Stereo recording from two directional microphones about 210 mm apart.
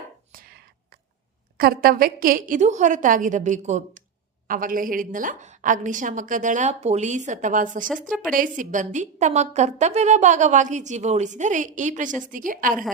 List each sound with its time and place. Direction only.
0.3 s whispering: 45° right (ahead or behind)
1.5 s a woman's voice: 45° right (ahead or behind)